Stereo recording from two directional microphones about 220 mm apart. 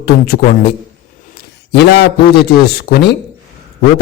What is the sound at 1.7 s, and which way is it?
A man's voice, 50° left (ahead or behind).